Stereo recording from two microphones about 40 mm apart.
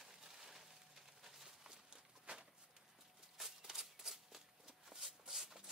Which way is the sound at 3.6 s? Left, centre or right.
Centre.